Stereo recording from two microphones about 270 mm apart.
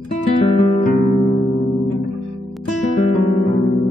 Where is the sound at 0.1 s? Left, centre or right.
Left.